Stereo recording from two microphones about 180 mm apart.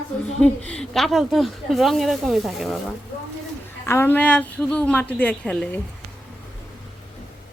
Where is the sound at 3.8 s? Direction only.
15° left (ahead or behind).